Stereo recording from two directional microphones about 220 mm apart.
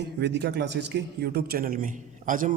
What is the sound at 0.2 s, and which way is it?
A man's voice, 50° right (ahead or behind).